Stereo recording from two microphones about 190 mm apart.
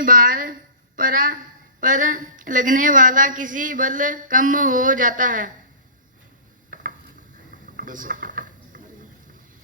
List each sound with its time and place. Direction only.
0.0 s a sound: 45° right (ahead or behind)
1.8 s a woman's voice: 45° right (ahead or behind)
7.8 s speech: 45° right (ahead or behind)